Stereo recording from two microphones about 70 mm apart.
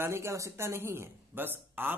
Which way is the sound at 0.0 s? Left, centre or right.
Right.